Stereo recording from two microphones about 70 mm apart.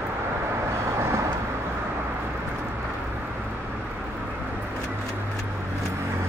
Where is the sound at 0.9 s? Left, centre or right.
Right.